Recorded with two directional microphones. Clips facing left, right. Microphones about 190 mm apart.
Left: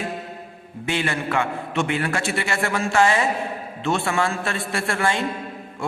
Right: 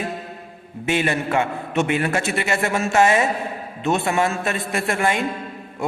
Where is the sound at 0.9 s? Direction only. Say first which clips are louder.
Right 3 dB; 20° right (ahead or behind).